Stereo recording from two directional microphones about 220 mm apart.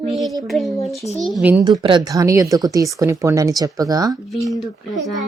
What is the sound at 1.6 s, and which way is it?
Speech, 20° right (ahead or behind).